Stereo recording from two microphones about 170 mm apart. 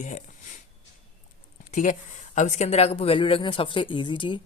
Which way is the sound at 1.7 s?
50° left (ahead or behind).